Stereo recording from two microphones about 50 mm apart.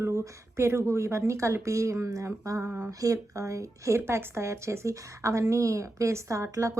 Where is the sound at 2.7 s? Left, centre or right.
Right.